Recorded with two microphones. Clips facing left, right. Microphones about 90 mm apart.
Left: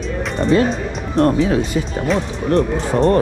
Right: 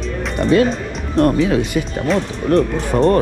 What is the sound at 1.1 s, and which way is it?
Speech, 30° left (ahead or behind).